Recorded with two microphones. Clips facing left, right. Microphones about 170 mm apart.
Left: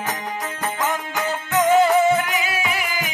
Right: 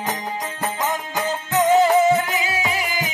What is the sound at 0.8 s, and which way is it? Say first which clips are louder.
Music: even; 15° right (ahead or behind).